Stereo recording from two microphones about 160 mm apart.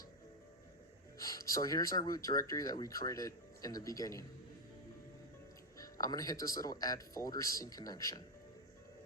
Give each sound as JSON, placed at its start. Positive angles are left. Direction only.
{"t": 1.2, "sound": "speech", "side_deg": 20}
{"t": 5.7, "sound": "speech", "side_deg": 20}